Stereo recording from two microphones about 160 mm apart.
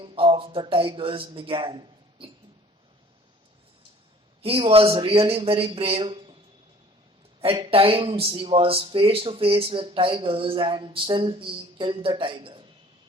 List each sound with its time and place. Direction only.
0.0 s speech: 35° right (ahead or behind)
4.4 s speech: 35° right (ahead or behind)
7.4 s speech: 35° right (ahead or behind)